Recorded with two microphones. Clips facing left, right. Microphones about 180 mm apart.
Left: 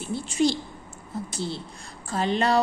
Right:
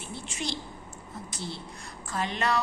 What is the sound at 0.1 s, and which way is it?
A woman's voice, 35° left (ahead or behind).